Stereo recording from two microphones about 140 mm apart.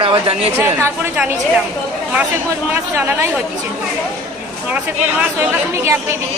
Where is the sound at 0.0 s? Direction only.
40° right (ahead or behind).